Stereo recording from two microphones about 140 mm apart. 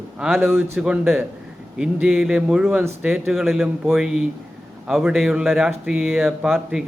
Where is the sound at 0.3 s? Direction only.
15° right (ahead or behind).